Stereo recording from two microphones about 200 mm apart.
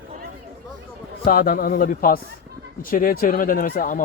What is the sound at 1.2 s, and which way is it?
Speech, 45° left (ahead or behind).